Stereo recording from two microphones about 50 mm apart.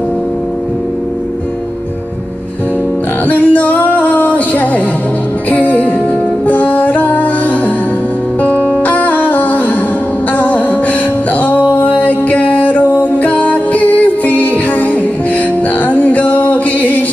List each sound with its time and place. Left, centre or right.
3.3 s music: left